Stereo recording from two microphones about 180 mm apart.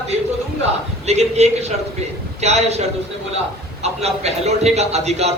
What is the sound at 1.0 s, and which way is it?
A man's voice, 35° right (ahead or behind).